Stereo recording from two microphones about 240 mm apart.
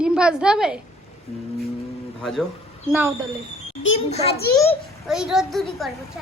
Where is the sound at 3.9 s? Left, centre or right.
Left.